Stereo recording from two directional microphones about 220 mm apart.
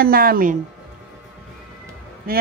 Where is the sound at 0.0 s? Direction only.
40° right (ahead or behind).